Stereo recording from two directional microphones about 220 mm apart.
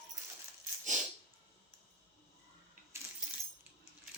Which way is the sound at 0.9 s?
35° right (ahead or behind).